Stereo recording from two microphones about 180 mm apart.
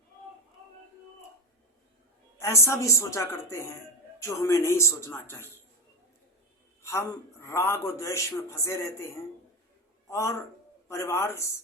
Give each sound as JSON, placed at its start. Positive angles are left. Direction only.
{"t": 2.4, "sound": "a man's voice", "side_deg": 15}
{"t": 6.8, "sound": "a man's voice", "side_deg": 15}
{"t": 10.1, "sound": "a man's voice", "side_deg": 15}